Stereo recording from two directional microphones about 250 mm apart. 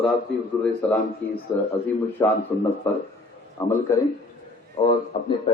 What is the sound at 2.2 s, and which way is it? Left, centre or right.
A man's voice, centre.